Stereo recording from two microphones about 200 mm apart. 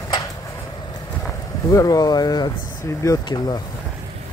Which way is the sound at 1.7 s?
20° left (ahead or behind).